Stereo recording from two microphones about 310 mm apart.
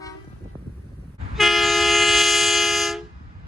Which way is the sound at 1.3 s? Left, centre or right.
Centre.